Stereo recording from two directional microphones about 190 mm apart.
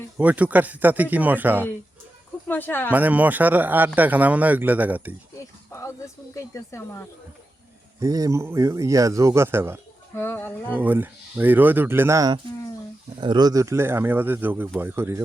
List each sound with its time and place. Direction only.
0.2 s a man's voice: 10° right (ahead or behind)
2.5 s speech: 10° left (ahead or behind)
2.9 s a man's voice: 10° right (ahead or behind)
6.3 s speech: 15° left (ahead or behind)
7.9 s a man's voice: 20° right (ahead or behind)
10.2 s speech: 10° left (ahead or behind)
10.8 s a man's voice: 10° right (ahead or behind)